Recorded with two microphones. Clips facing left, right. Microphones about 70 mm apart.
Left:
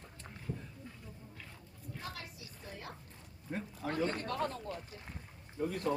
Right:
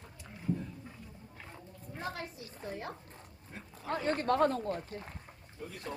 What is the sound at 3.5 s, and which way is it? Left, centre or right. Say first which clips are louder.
Roaring cats: left 9 dB; left.